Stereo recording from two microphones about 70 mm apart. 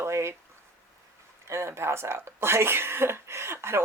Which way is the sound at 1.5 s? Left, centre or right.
Right.